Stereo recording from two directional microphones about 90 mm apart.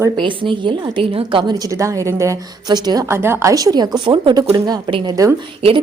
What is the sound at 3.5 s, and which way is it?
Speech, 40° right (ahead or behind).